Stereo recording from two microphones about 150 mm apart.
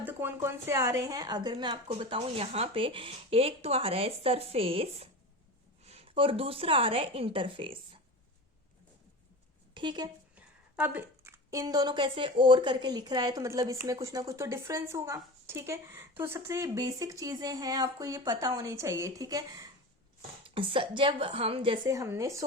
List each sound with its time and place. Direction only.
0.0 s a woman's voice: 15° right (ahead or behind); by 7.8 s 35° right (ahead or behind)
9.7 s speech: 30° right (ahead or behind)
10.3 s a woman's voice: 10° right (ahead or behind)
20.4 s a woman's voice: 35° right (ahead or behind)
21.8 s a woman's voice: 20° right (ahead or behind)